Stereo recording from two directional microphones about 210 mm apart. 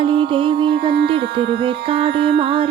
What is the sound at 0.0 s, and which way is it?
Music, 25° right (ahead or behind).